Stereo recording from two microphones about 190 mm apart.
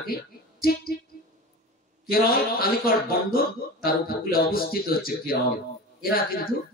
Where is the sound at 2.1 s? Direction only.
50° left (ahead or behind).